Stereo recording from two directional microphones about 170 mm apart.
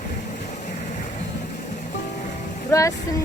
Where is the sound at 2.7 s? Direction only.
20° left (ahead or behind).